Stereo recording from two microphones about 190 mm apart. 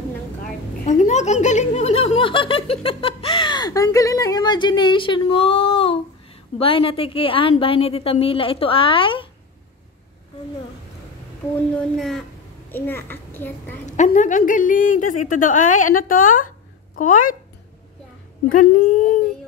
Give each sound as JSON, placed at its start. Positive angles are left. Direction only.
{"t": 0.8, "sound": "a sound", "side_deg": 40}
{"t": 6.6, "sound": "a woman's voice", "side_deg": 30}
{"t": 11.7, "sound": "a child's voice", "side_deg": 5}
{"t": 13.8, "sound": "a woman's voice", "side_deg": 40}
{"t": 18.5, "sound": "a woman's voice", "side_deg": 45}